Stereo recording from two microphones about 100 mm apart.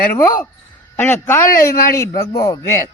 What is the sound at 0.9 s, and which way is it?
A man's voice, 20° left (ahead or behind).